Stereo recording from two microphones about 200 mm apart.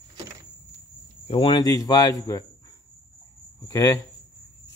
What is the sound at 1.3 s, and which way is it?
Speech, 25° left (ahead or behind).